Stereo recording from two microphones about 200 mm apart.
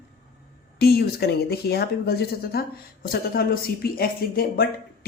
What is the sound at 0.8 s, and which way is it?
A woman's voice, 50° left (ahead or behind).